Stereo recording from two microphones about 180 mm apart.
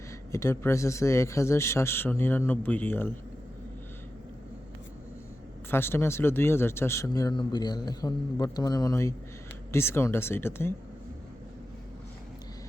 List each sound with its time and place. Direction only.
0.3 s a man's voice: 15° left (ahead or behind)
5.7 s a man's voice: 15° left (ahead or behind)